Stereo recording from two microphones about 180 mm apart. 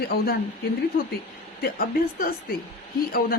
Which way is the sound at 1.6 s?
55° left (ahead or behind).